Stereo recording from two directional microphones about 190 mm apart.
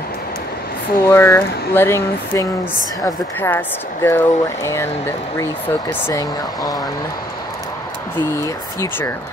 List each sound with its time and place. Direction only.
1.0 s speech: 15° left (ahead or behind)